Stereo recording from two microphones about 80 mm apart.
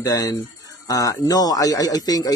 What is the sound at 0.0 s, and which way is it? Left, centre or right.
Speech, left.